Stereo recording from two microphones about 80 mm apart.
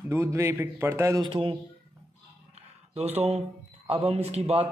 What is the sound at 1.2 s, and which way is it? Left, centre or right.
Speech, right.